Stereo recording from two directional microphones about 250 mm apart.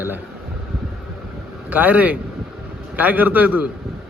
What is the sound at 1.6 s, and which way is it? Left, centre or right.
A man's voice, centre.